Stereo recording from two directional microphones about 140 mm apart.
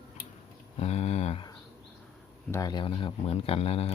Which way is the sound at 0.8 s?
50° left (ahead or behind).